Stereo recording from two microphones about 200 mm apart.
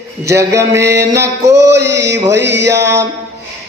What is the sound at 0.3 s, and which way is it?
Mantra, 15° right (ahead or behind).